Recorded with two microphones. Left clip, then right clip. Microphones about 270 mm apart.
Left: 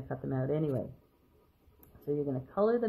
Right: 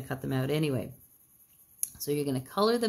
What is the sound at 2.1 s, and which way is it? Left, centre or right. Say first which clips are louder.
Speech: right 2 dB; right.